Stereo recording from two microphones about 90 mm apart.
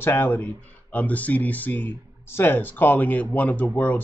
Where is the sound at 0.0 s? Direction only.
25° left (ahead or behind).